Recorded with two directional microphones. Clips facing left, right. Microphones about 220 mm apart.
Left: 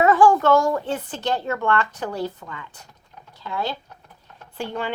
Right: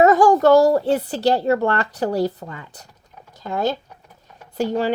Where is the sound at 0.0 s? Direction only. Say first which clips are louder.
Right 3 dB; 40° right (ahead or behind).